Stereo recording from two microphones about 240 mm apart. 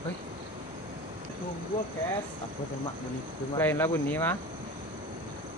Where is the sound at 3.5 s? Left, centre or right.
Centre.